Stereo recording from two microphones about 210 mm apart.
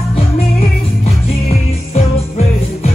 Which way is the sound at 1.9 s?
30° left (ahead or behind).